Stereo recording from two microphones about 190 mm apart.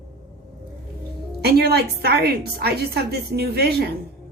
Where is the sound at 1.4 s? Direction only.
55° right (ahead or behind).